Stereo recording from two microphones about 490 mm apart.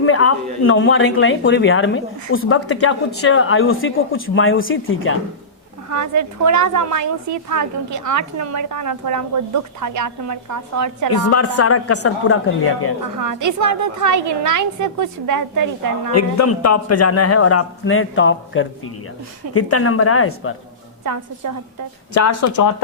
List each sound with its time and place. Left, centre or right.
0.0 s speech: left
5.9 s a woman's voice: right
11.3 s speech: left
13.2 s a woman's voice: right
16.1 s speech: left
21.0 s a woman's voice: right
22.1 s speech: left